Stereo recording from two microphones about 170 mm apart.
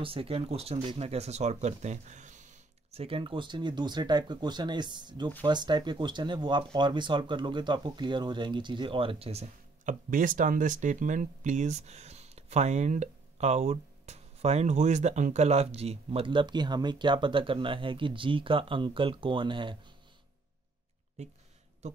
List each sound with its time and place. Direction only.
0.0 s speech: 35° right (ahead or behind)
21.2 s speech: 40° right (ahead or behind)